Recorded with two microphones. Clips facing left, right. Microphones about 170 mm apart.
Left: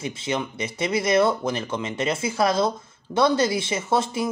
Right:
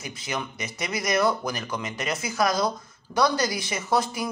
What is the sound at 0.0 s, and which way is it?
Speech, 25° left (ahead or behind).